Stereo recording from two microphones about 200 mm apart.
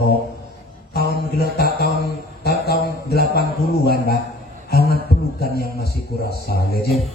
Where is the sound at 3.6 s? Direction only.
50° left (ahead or behind).